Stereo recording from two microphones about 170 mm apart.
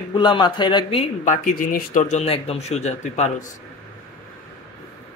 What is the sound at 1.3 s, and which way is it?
Speech, 50° left (ahead or behind).